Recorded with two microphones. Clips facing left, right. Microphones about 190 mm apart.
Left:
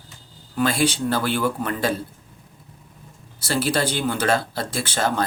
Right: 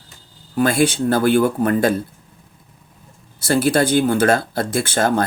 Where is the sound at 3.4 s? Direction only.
50° right (ahead or behind).